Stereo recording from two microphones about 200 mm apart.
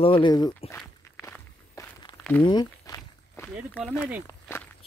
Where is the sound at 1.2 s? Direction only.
15° left (ahead or behind).